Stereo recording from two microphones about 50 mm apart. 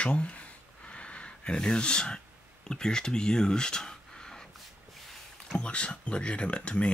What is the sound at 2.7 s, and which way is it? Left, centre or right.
Speech, centre.